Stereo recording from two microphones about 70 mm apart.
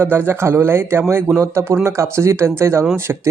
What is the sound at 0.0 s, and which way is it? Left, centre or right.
Speech, right.